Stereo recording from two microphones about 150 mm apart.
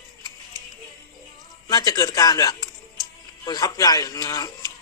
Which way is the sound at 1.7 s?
25° left (ahead or behind).